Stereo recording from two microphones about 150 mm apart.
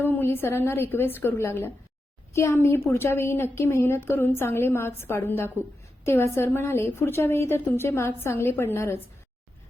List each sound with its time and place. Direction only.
0.0 s a woman's voice: 15° left (ahead or behind)